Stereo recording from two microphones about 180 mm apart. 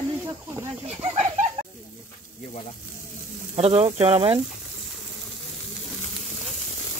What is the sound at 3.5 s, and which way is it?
Speech, 30° right (ahead or behind).